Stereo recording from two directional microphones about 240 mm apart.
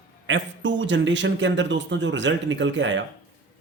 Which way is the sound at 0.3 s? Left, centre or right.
Right.